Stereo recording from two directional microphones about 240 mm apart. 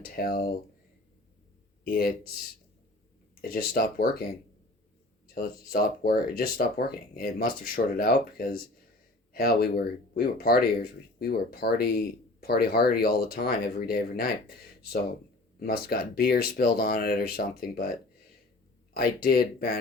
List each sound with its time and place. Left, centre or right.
0.0 s speech: left
1.8 s speech: left
3.4 s speech: left
5.3 s speech: left
18.9 s speech: left